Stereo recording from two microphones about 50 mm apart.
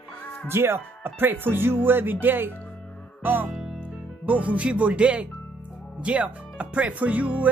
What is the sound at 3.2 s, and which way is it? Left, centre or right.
Music, right.